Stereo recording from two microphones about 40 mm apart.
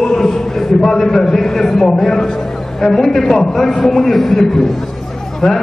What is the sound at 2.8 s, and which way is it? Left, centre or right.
A man's voice, centre.